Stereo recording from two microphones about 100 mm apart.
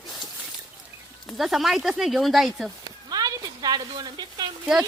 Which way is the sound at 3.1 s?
40° right (ahead or behind).